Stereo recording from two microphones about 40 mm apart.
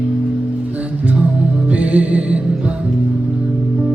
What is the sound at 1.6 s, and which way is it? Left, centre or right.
Music, right.